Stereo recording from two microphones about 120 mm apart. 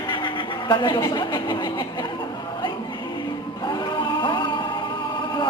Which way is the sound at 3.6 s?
35° left (ahead or behind).